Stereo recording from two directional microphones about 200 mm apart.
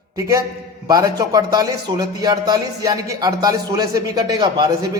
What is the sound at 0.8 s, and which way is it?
A man's voice, 20° right (ahead or behind).